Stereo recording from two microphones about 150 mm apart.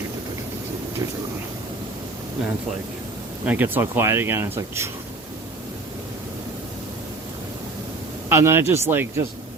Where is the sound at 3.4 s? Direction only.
10° right (ahead or behind).